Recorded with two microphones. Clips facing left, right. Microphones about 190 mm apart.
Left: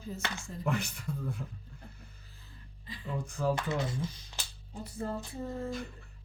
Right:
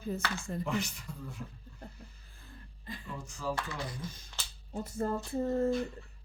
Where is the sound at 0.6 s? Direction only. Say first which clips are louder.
Left 4 dB; 55° left (ahead or behind).